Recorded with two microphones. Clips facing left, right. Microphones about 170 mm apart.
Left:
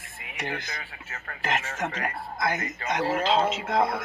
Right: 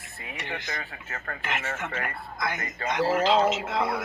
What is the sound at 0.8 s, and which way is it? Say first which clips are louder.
Speech: right 4 dB; 40° right (ahead or behind).